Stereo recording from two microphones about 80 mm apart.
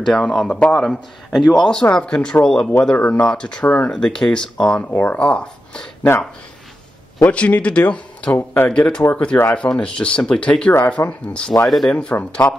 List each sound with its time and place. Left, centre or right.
0.0 s a man's voice: centre
3.6 s speech: centre
3.9 s speech: centre
7.2 s speech: centre